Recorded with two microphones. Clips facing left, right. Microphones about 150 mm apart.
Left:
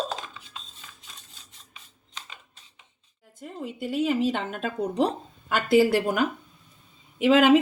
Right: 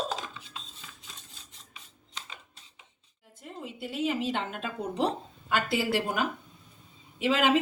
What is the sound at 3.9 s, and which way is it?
Speech, 50° left (ahead or behind).